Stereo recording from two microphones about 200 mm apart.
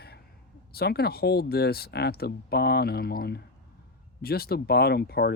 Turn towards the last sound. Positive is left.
turn(degrees=50)  # may be behind; listen again after turning